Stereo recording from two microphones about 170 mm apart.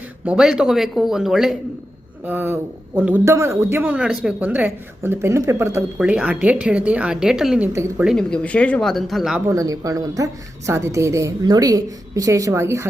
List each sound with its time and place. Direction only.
0.3 s a man's voice: 5° right (ahead or behind)
7.7 s a man's voice: 15° right (ahead or behind)
8.0 s speech: 5° left (ahead or behind)
9.5 s a woman's voice: 20° right (ahead or behind)